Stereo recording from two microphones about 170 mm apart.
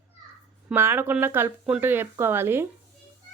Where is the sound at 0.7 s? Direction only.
10° right (ahead or behind).